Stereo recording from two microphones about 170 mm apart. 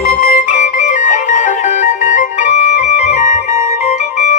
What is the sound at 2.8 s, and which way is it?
Organ, 45° left (ahead or behind).